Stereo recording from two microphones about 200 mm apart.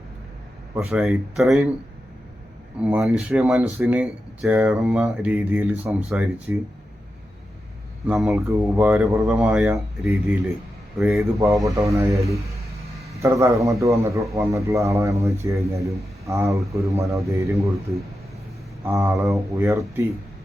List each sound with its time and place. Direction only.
0.8 s speech: 5° right (ahead or behind)
2.8 s a man's voice: 5° right (ahead or behind)
8.0 s a man's voice: centre (ahead or behind)
11.0 s speech: centre (ahead or behind)
11.3 s a man's voice: 15° right (ahead or behind)